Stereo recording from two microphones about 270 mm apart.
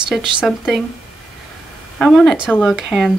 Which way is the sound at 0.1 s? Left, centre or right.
Centre.